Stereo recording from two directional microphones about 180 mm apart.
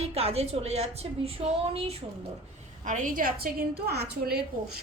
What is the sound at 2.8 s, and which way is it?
A woman's voice, 45° right (ahead or behind).